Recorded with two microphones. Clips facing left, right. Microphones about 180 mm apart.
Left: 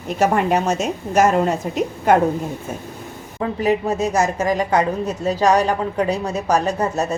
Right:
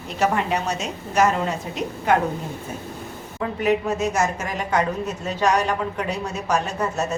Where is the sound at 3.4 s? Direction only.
35° left (ahead or behind).